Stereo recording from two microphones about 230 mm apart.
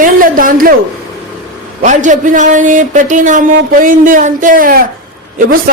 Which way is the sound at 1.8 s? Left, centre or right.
Right.